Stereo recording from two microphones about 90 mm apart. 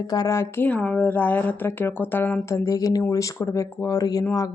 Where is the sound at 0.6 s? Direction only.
15° left (ahead or behind).